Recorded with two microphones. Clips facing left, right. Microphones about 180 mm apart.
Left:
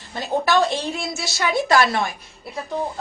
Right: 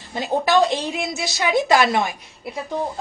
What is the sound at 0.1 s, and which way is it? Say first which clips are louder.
A woman's voice: right 1 dB; 15° right (ahead or behind).